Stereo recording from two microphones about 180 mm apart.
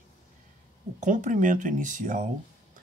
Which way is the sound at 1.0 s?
45° right (ahead or behind).